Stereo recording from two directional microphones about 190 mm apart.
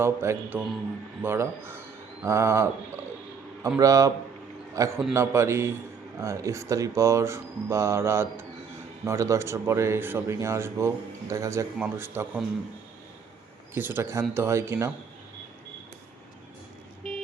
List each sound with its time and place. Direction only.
0.0 s a man's voice: 15° right (ahead or behind)
13.7 s speech: 10° right (ahead or behind)